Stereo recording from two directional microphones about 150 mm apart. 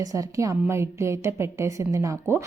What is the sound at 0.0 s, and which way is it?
A woman's voice, 20° right (ahead or behind).